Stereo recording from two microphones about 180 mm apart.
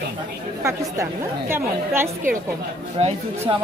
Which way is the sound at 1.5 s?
15° right (ahead or behind).